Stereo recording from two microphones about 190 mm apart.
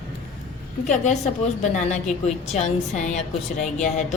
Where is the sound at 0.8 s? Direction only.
40° left (ahead or behind).